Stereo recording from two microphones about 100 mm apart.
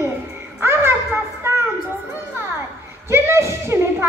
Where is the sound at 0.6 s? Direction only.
25° right (ahead or behind).